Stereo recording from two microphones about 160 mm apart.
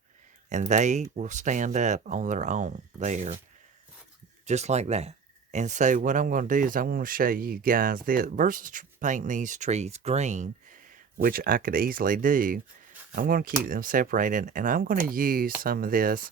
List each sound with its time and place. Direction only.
0.5 s speech: 50° right (ahead or behind)
4.4 s speech: 45° right (ahead or behind)
11.2 s speech: 65° right (ahead or behind)